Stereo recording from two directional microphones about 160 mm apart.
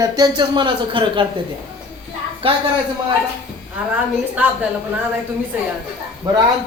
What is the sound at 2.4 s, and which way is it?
Speech, 35° right (ahead or behind).